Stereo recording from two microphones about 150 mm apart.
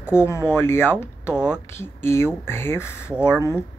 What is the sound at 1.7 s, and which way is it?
Speech, 15° left (ahead or behind).